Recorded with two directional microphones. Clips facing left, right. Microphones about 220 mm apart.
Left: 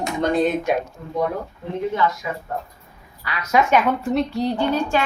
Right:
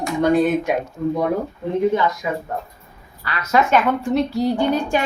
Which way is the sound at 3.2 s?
10° left (ahead or behind).